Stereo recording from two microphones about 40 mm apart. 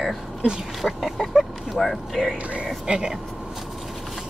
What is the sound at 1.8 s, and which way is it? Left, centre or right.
Speech, centre.